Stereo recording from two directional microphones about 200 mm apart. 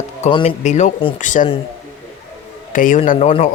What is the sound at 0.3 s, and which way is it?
A man's voice, 35° left (ahead or behind).